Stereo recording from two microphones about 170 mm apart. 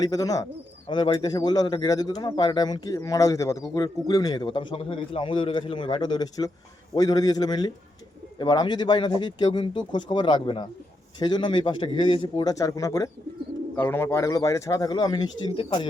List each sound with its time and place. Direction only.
0.0 s speech: 20° left (ahead or behind)